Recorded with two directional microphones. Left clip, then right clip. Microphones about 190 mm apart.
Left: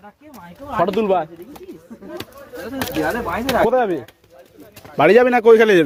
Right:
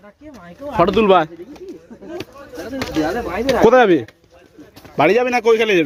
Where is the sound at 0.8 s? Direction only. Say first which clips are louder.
Right 5 dB; 35° right (ahead or behind).